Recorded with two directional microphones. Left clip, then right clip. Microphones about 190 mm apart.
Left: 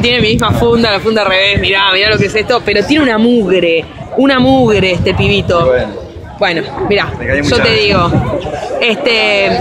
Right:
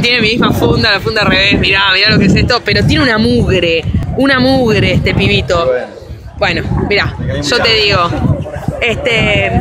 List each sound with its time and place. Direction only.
0.0 s speech: 5° left (ahead or behind)
8.7 s speech: 15° left (ahead or behind)